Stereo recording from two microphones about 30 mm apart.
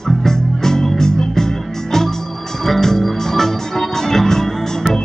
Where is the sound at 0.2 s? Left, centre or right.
Centre.